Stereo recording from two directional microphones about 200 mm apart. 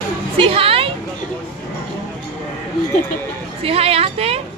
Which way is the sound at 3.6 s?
30° right (ahead or behind).